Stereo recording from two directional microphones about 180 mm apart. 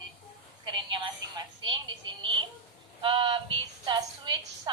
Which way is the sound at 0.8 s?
25° right (ahead or behind).